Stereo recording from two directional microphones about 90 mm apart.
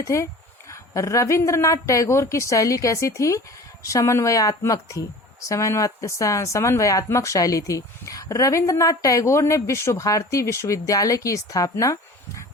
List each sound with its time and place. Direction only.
0.0 s speech: 35° left (ahead or behind)